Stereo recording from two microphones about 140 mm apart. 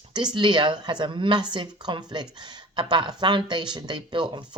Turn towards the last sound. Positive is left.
turn(degrees=-35)  # may be behind; listen again after turning